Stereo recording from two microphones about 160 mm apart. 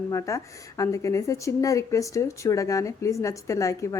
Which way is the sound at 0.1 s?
20° left (ahead or behind).